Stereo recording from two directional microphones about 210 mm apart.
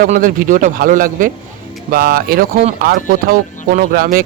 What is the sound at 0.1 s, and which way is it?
Speech, 40° right (ahead or behind).